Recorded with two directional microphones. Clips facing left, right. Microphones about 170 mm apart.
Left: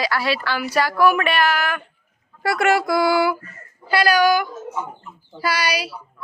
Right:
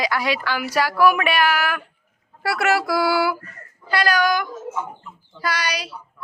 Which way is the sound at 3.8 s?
5° left (ahead or behind).